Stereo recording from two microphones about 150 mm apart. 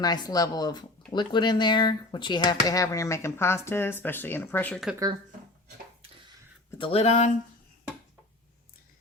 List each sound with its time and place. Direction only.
0.0 s speech: 25° left (ahead or behind)
6.7 s speech: 40° left (ahead or behind)